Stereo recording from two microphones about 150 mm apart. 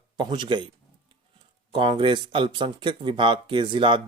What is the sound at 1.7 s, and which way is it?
Speech, 35° right (ahead or behind).